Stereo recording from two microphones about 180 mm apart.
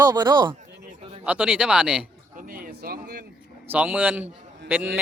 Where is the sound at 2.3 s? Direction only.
50° right (ahead or behind).